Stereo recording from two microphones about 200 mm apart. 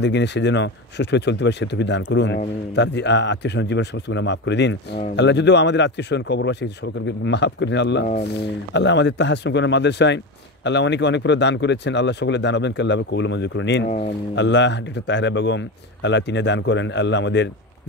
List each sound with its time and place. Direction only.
0.0 s speech: 60° left (ahead or behind)
13.8 s speech: 35° left (ahead or behind)
14.3 s speech: 60° left (ahead or behind)